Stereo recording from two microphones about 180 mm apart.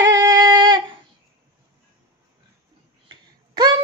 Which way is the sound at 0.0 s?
20° right (ahead or behind).